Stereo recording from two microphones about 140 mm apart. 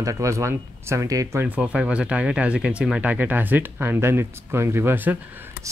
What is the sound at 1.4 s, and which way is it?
Speech, 10° right (ahead or behind).